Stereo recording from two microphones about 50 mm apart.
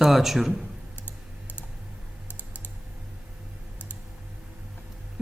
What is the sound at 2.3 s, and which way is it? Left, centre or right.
Typing, left.